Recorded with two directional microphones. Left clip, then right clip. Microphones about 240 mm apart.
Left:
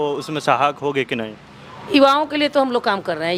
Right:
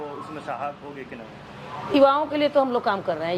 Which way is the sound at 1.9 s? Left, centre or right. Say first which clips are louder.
Left 4 dB; left.